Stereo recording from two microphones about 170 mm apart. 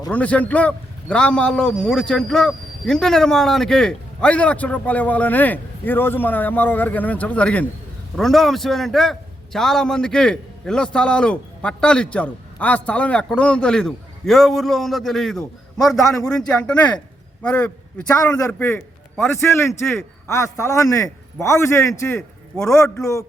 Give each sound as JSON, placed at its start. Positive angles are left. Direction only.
{"t": 0.1, "sound": "a man's voice", "side_deg": 10}